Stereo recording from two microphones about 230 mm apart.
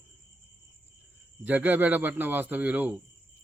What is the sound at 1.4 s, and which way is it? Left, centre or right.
Speech, centre.